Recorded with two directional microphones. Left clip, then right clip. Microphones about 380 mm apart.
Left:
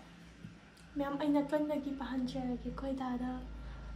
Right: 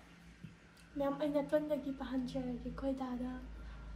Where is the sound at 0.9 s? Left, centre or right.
Centre.